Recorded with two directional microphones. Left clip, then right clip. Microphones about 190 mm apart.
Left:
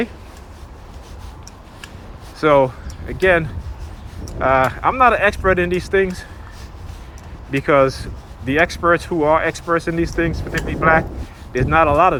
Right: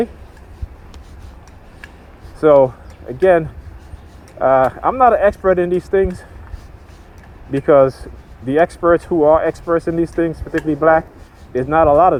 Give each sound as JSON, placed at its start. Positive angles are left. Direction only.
{"t": 2.4, "sound": "speech", "side_deg": -45}
{"t": 7.7, "sound": "speech", "side_deg": -50}